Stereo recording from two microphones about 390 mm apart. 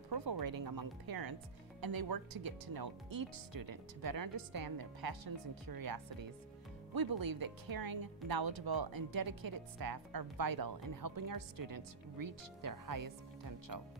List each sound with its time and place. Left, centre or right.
0.1 s speech: right